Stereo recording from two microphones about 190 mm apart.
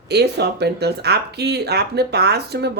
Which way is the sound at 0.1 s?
60° right (ahead or behind).